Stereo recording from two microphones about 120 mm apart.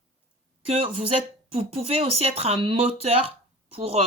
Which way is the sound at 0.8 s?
50° right (ahead or behind).